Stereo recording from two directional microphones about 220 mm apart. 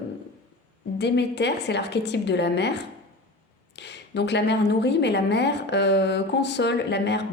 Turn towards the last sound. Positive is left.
turn(degrees=50)  # may be behind; listen again after turning